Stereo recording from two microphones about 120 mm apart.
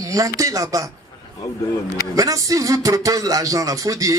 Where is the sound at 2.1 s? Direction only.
30° right (ahead or behind).